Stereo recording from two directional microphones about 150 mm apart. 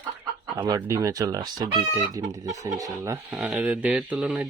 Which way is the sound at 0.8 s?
20° right (ahead or behind).